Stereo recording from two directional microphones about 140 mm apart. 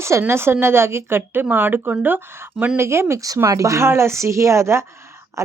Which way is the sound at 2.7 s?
20° right (ahead or behind).